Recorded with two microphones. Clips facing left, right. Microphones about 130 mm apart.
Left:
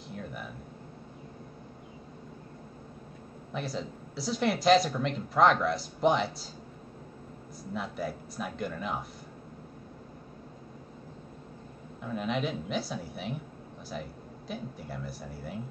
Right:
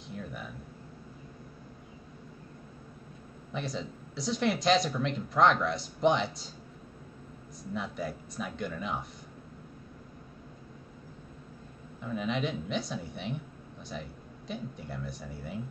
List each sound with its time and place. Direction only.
0.1 s a sound: centre (ahead or behind)
3.5 s speech: centre (ahead or behind)
7.7 s speech: centre (ahead or behind)
12.0 s speech: centre (ahead or behind)